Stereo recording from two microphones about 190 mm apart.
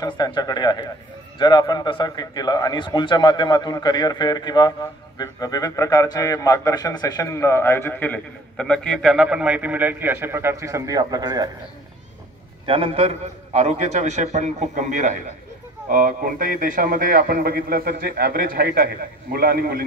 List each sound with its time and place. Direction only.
0.0 s a man's voice: 20° left (ahead or behind); by 11.5 s 20° right (ahead or behind)
12.6 s a man's voice: 30° right (ahead or behind); by 19.8 s 50° right (ahead or behind)